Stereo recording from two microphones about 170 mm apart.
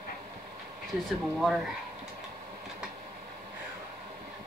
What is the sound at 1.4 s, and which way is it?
Speech, centre (ahead or behind).